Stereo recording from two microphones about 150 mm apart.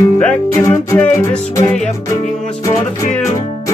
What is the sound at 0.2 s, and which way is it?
Music, 10° left (ahead or behind).